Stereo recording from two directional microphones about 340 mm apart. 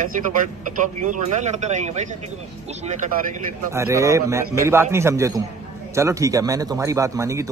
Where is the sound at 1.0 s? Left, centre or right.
Right.